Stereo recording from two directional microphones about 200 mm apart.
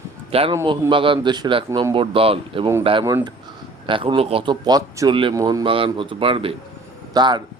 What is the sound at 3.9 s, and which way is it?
Speech, 25° right (ahead or behind).